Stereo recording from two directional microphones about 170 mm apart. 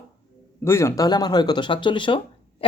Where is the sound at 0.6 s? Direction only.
15° left (ahead or behind).